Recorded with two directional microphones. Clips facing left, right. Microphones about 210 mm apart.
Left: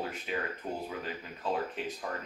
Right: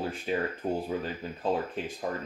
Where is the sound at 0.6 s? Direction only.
35° right (ahead or behind).